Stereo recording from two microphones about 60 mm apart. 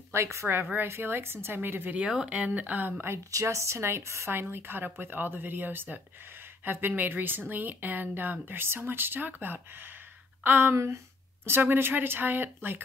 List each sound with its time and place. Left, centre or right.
0.1 s a woman's voice: right
0.7 s speech: right
2.2 s speech: right
3.3 s speech: right